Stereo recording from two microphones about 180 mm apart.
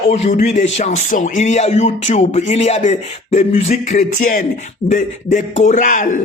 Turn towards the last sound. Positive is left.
turn(degrees=45)  # may be behind; listen again after turning